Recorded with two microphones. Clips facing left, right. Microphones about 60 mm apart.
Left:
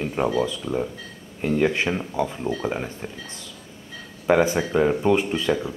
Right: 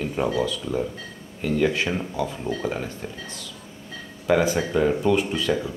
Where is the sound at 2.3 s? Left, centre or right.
Centre.